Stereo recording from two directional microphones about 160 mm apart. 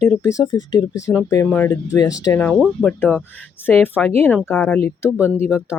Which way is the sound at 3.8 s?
10° left (ahead or behind).